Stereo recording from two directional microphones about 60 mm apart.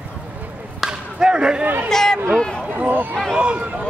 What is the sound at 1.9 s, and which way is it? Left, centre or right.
Speech, centre.